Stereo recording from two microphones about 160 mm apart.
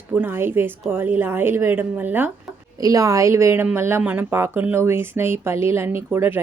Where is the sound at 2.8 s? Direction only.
20° right (ahead or behind).